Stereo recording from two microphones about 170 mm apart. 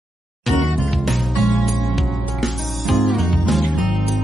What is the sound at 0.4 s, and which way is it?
Music, centre (ahead or behind).